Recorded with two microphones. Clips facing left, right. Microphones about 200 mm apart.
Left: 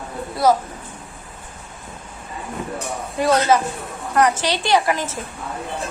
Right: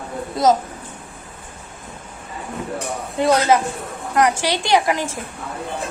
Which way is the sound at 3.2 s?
15° right (ahead or behind).